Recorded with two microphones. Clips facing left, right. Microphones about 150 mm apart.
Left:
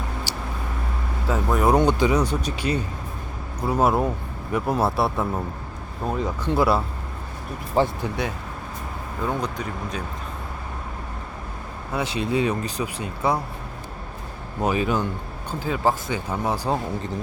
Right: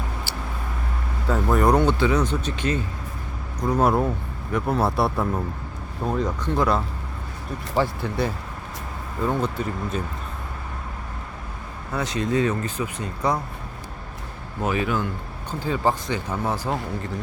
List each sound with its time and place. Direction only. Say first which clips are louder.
0.3 s vehicle: left 1 dB; 15° left (ahead or behind)
1.3 s speech: right 1 dB; centre (ahead or behind)
1.7 s speech: left 1 dB; 15° left (ahead or behind)
8.0 s speech: even; 10° left (ahead or behind)
9.2 s speech: right 3 dB; centre (ahead or behind)
11.9 s speech: even; 15° left (ahead or behind)
14.6 s speech: left 2 dB; 20° left (ahead or behind)
15.6 s speech: even; 5° left (ahead or behind)